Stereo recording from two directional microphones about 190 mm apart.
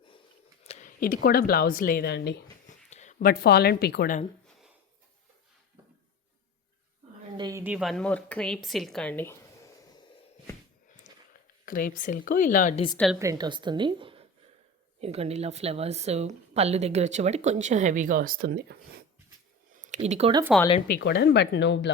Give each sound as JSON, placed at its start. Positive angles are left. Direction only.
{"t": 0.6, "sound": "speech", "side_deg": 35}
{"t": 2.6, "sound": "speech", "side_deg": 40}
{"t": 7.3, "sound": "a sound", "side_deg": -20}
{"t": 7.6, "sound": "speech", "side_deg": -5}
{"t": 11.1, "sound": "a sound", "side_deg": 40}
{"t": 11.6, "sound": "a woman's voice", "side_deg": 45}
{"t": 13.1, "sound": "a woman's voice", "side_deg": -20}
{"t": 19.7, "sound": "a sound", "side_deg": -40}
{"t": 21.0, "sound": "speech", "side_deg": 60}